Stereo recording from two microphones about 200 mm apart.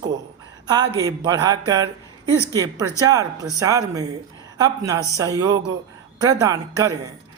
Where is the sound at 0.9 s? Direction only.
20° right (ahead or behind).